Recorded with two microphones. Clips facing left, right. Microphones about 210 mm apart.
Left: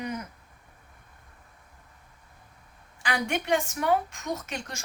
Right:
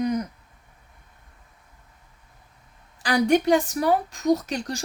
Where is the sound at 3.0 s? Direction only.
35° right (ahead or behind).